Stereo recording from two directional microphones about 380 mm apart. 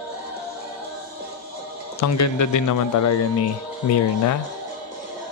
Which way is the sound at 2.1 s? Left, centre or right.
Left.